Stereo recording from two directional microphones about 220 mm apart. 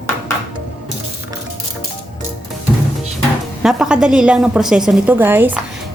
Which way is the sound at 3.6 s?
5° right (ahead or behind).